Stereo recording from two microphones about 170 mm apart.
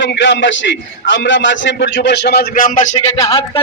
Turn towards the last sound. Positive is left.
turn(degrees=20)  # may be behind; listen again after turning